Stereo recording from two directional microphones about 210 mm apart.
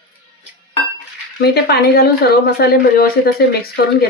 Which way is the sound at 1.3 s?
50° left (ahead or behind).